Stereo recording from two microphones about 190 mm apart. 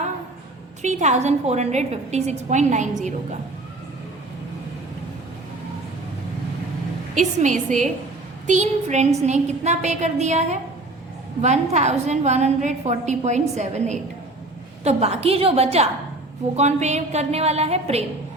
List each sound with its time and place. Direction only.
0.8 s a woman's voice: 40° right (ahead or behind)
7.2 s a woman's voice: 40° right (ahead or behind)